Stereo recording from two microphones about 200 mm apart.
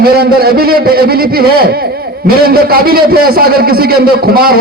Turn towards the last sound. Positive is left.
turn(degrees=-50)  # may be behind; listen again after turning